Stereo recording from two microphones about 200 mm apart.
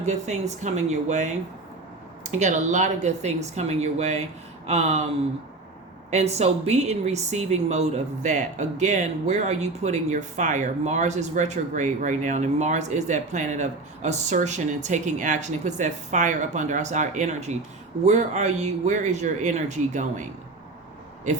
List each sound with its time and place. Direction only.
0.0 s speech: 35° right (ahead or behind)
2.4 s speech: 35° right (ahead or behind)
6.1 s speech: 35° right (ahead or behind)